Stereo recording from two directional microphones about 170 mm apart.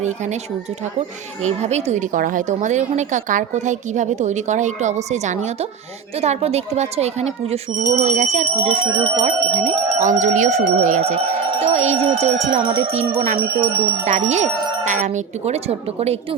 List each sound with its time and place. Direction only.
1.5 s speech: 40° right (ahead or behind)